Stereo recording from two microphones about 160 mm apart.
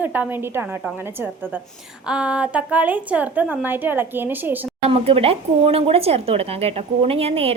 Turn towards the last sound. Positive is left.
turn(degrees=-40)  # may be behind; listen again after turning